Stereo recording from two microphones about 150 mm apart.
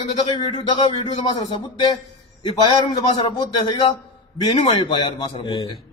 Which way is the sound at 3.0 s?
30° left (ahead or behind).